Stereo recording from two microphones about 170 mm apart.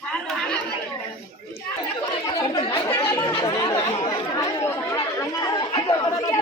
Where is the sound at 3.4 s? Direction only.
20° left (ahead or behind).